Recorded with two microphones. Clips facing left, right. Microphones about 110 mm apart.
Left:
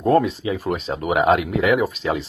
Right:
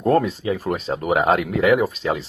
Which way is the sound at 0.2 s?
35° right (ahead or behind).